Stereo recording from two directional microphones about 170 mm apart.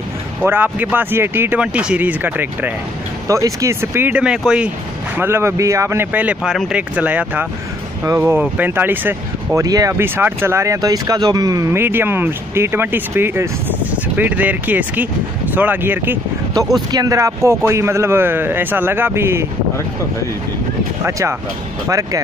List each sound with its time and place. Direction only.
0.4 s speech: 10° right (ahead or behind)
21.0 s speech: 15° right (ahead or behind)